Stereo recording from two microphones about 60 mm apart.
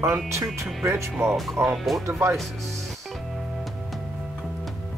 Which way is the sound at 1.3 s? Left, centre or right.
Centre.